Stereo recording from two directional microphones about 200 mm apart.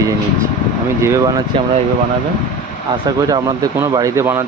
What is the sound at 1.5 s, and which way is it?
Speech, 25° right (ahead or behind).